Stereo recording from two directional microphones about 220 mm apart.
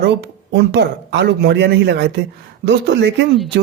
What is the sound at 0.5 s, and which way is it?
Speech, 50° right (ahead or behind).